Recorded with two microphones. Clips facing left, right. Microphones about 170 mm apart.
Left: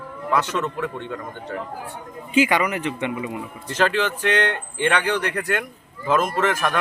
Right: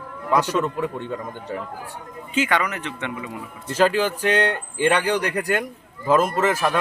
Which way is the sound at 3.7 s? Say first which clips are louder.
Right 2 dB; 10° right (ahead or behind).